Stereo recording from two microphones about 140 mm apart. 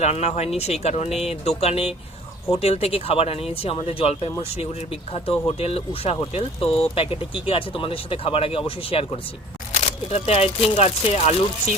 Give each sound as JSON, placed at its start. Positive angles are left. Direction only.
{"t": 0.0, "sound": "speech", "side_deg": 50}
{"t": 9.7, "sound": "speech", "side_deg": 55}